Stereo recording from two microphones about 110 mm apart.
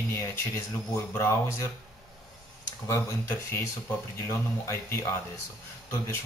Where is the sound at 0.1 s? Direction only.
25° left (ahead or behind).